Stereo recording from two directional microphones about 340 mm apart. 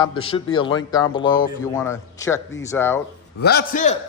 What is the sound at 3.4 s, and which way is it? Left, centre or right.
Speech, left.